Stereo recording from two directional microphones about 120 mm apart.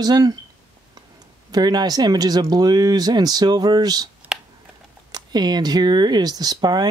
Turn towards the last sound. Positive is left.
turn(degrees=-35)  # may be behind; listen again after turning